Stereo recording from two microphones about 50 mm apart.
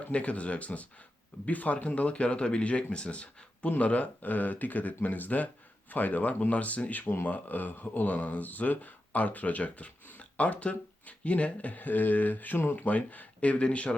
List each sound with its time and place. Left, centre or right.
0.1 s speech: left